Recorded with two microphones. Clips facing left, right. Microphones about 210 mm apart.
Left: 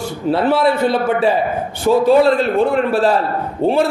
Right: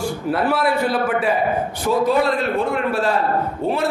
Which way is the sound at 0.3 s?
25° left (ahead or behind).